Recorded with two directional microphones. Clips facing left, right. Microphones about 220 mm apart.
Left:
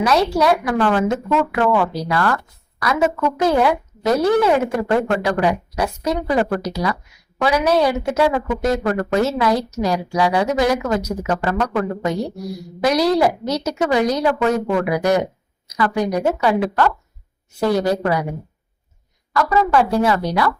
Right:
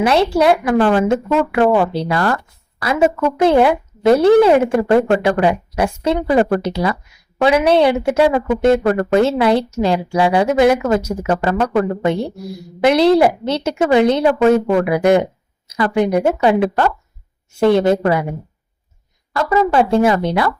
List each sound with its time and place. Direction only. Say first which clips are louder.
0.0 s a woman's voice: right 3 dB; 25° right (ahead or behind)
19.3 s a woman's voice: right 2 dB; 25° right (ahead or behind)